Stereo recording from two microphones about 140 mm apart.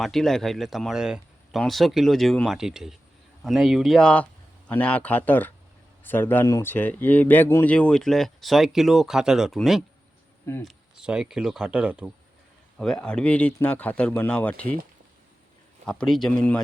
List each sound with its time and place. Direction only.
0.0 s speech: centre (ahead or behind)
10.4 s speech: 20° left (ahead or behind)
10.7 s speech: 5° right (ahead or behind)
12.8 s speech: 5° left (ahead or behind)
15.9 s speech: 5° left (ahead or behind)